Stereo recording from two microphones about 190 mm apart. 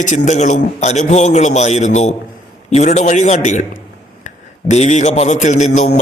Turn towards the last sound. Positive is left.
turn(degrees=35)  # may be behind; listen again after turning